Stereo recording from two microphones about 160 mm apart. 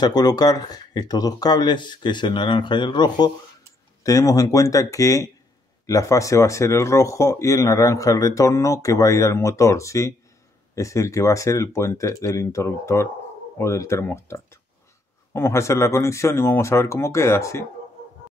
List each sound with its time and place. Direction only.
0.0 s speech: 25° left (ahead or behind)